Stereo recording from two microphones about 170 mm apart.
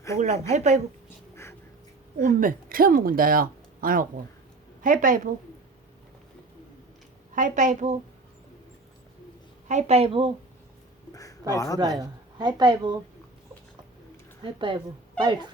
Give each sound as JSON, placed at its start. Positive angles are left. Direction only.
{"t": 0.5, "sound": "a woman's voice", "side_deg": -45}
{"t": 2.1, "sound": "a woman's voice", "side_deg": -55}
{"t": 7.3, "sound": "a woman's voice", "side_deg": -50}
{"t": 9.6, "sound": "a woman's voice", "side_deg": -40}
{"t": 11.1, "sound": "a sound", "side_deg": 20}
{"t": 11.5, "sound": "speech", "side_deg": 20}
{"t": 11.8, "sound": "speech", "side_deg": -25}
{"t": 14.4, "sound": "speech", "side_deg": -30}